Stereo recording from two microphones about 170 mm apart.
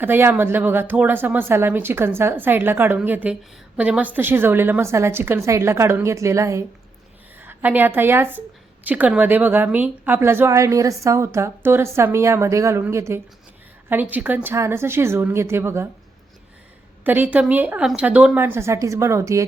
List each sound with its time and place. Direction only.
0.0 s a woman's voice: 10° right (ahead or behind)
17.0 s a woman's voice: 10° right (ahead or behind)